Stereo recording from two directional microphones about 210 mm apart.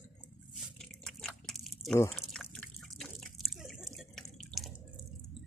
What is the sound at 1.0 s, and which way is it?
Biting, 5° left (ahead or behind).